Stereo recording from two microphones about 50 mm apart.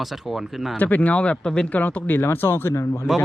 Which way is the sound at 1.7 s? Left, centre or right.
Left.